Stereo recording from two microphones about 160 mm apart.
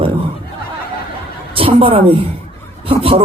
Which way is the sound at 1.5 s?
35° right (ahead or behind).